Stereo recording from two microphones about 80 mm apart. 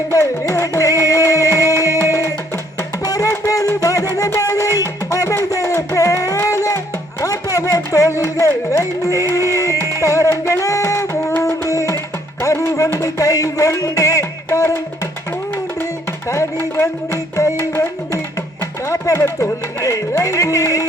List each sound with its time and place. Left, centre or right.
0.1 s music: left
3.1 s music: left
16.2 s music: left
18.6 s music: left